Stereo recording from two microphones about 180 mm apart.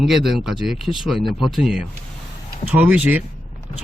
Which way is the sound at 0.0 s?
Centre (ahead or behind).